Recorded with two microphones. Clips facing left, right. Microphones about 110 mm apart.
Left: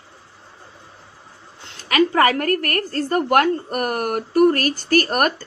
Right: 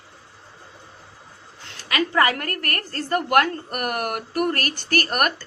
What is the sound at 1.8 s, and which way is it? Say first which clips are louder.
A woman's voice: left 4 dB; 45° left (ahead or behind).